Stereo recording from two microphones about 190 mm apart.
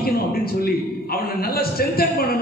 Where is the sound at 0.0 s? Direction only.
55° left (ahead or behind).